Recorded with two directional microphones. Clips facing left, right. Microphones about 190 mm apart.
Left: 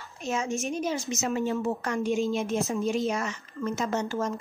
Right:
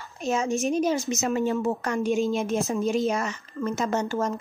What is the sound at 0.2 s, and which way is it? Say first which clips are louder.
A woman's voice: right 5 dB; 40° right (ahead or behind).